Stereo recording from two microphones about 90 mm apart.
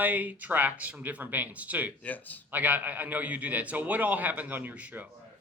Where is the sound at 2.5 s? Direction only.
20° right (ahead or behind).